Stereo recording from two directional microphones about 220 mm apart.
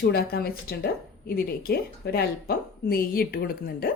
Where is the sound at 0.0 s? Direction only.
45° left (ahead or behind).